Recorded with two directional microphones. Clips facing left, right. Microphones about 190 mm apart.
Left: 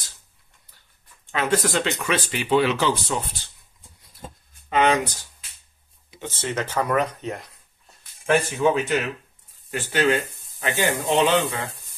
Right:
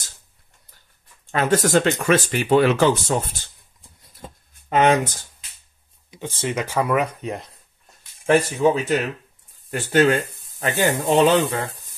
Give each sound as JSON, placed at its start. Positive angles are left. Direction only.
{"t": 1.3, "sound": "speech", "side_deg": -45}
{"t": 4.6, "sound": "speech", "side_deg": -45}
{"t": 6.2, "sound": "speech", "side_deg": -15}
{"t": 8.6, "sound": "speech", "side_deg": -35}